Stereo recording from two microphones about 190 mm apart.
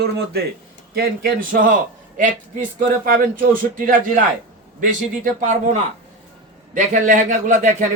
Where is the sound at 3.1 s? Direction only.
50° right (ahead or behind).